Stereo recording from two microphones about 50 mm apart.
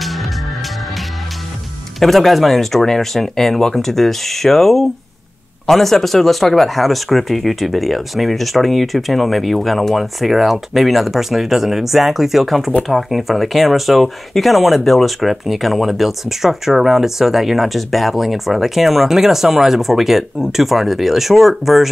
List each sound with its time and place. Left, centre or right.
0.0 s music: centre
2.0 s speech: centre